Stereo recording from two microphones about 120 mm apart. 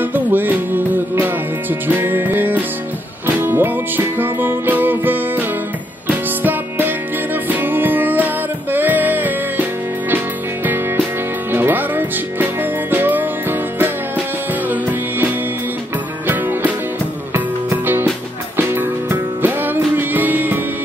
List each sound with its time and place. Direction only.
0.0 s music: 15° right (ahead or behind)
16.3 s music: 15° right (ahead or behind)